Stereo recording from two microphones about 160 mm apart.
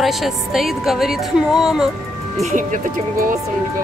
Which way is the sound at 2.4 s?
55° right (ahead or behind).